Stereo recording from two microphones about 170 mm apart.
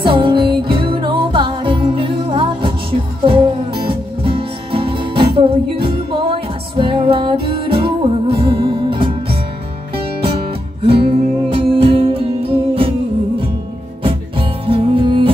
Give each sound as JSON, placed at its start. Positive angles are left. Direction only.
{"t": 0.0, "sound": "music", "side_deg": -30}
{"t": 10.8, "sound": "music", "side_deg": -30}
{"t": 14.7, "sound": "music", "side_deg": -30}